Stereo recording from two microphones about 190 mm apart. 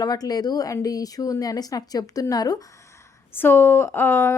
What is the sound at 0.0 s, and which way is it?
A woman's voice, 20° left (ahead or behind).